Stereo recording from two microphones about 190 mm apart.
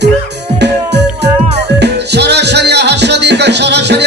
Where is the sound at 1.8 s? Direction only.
60° right (ahead or behind).